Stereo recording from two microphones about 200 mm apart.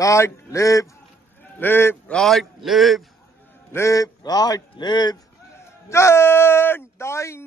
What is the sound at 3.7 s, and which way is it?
Speech, 15° left (ahead or behind).